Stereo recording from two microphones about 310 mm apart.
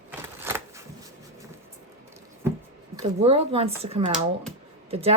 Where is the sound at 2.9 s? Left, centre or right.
Centre.